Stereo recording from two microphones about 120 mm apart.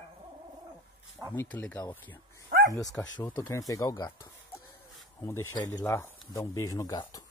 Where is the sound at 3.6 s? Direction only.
30° left (ahead or behind).